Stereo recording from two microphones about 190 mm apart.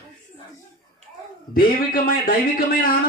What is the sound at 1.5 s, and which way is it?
Speech, 50° left (ahead or behind).